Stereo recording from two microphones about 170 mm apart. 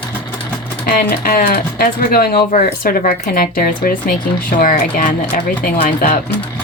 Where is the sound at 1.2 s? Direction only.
55° left (ahead or behind).